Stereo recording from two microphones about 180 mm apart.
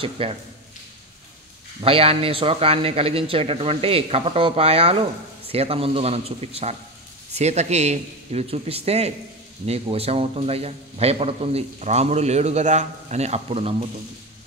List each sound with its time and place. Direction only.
0.0 s a man's voice: 30° right (ahead or behind)
1.8 s a man's voice: 30° right (ahead or behind)